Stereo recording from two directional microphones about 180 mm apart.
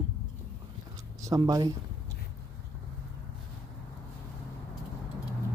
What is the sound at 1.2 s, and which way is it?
Speech, 20° right (ahead or behind).